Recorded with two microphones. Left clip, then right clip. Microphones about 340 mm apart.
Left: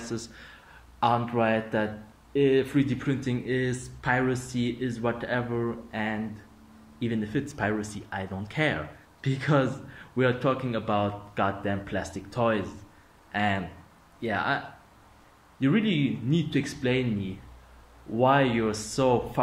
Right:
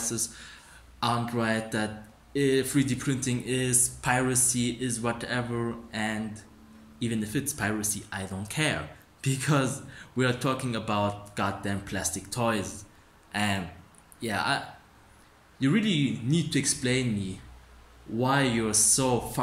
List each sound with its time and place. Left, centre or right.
0.0 s speech: centre
15.6 s speech: centre